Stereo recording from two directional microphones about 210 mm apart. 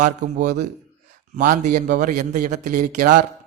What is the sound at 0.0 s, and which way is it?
A man's voice, 35° right (ahead or behind).